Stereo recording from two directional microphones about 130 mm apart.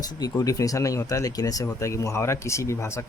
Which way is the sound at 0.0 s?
30° left (ahead or behind).